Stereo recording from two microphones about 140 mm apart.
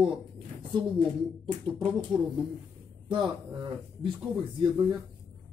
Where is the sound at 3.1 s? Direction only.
35° right (ahead or behind).